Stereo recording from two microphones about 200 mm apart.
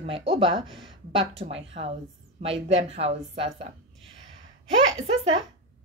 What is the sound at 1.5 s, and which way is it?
A woman's voice, 30° right (ahead or behind).